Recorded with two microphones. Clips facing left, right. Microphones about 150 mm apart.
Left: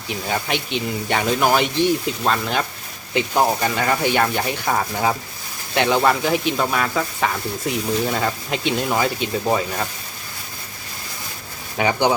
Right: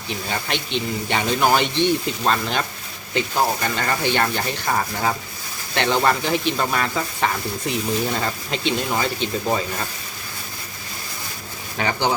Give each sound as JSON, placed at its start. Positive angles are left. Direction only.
{"t": 0.1, "sound": "speech", "side_deg": 10}
{"t": 3.2, "sound": "speech", "side_deg": 15}
{"t": 5.7, "sound": "speech", "side_deg": 5}
{"t": 11.8, "sound": "speech", "side_deg": 15}